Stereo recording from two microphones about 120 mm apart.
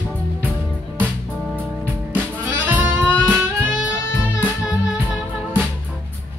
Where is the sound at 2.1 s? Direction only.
15° right (ahead or behind).